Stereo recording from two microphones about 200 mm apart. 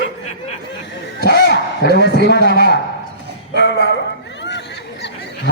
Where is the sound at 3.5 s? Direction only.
55° left (ahead or behind).